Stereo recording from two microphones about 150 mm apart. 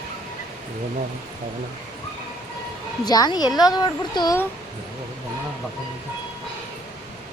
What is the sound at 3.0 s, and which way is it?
Speech, 25° left (ahead or behind).